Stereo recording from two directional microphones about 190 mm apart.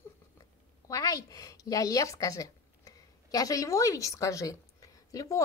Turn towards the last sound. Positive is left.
turn(degrees=15)  # may be behind; listen again after turning